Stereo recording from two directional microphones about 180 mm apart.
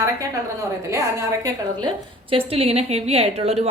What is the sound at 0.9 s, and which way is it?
A woman's voice, 15° right (ahead or behind).